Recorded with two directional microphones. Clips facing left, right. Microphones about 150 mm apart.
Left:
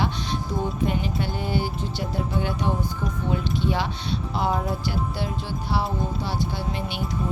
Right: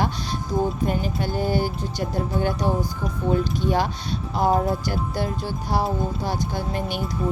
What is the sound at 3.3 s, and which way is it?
Speech, 45° right (ahead or behind).